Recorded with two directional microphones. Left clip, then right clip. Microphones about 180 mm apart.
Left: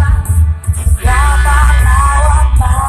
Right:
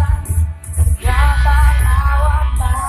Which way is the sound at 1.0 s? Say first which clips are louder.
Left 5 dB; 35° left (ahead or behind).